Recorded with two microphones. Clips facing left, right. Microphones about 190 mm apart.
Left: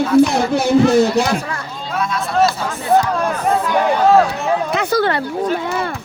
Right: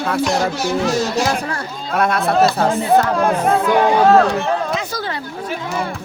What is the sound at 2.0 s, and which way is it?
Speech, 60° right (ahead or behind).